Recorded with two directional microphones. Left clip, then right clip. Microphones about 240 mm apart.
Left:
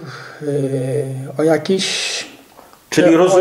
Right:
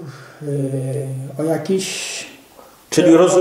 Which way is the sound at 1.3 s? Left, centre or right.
Left.